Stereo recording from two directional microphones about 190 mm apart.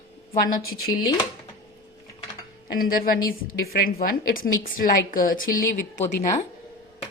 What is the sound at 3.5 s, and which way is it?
A woman's voice, 50° left (ahead or behind).